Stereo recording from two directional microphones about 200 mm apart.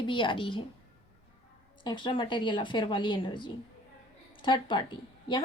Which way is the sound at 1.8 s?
25° left (ahead or behind).